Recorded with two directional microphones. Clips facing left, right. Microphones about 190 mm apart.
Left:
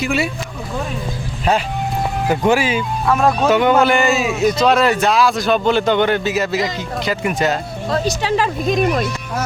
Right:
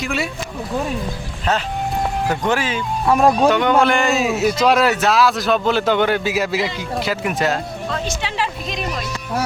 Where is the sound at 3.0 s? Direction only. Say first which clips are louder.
Right 2 dB; 15° right (ahead or behind).